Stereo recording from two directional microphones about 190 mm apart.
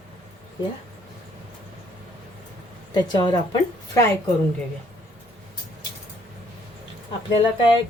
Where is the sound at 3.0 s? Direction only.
20° left (ahead or behind).